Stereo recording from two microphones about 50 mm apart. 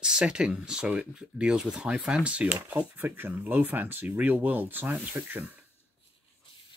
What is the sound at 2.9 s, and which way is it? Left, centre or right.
Speech, right.